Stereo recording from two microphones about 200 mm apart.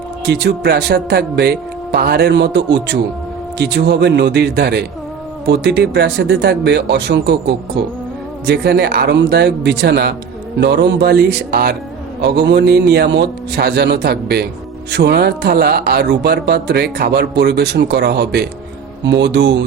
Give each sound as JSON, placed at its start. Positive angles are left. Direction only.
{"t": 0.3, "sound": "speech", "side_deg": -55}